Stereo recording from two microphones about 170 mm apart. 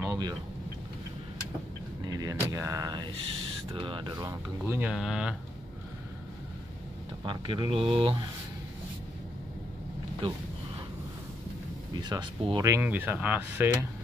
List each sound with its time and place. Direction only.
0.0 s vehicle: 20° right (ahead or behind)
2.0 s speech: 20° right (ahead or behind); by 5.3 s 5° right (ahead or behind)
7.2 s speech: 30° right (ahead or behind)
11.9 s speech: 25° right (ahead or behind)